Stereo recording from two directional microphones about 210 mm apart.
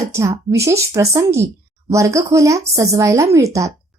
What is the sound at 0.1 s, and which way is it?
A woman's voice, 15° right (ahead or behind).